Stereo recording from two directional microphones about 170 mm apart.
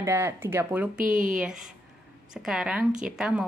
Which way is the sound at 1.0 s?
50° right (ahead or behind).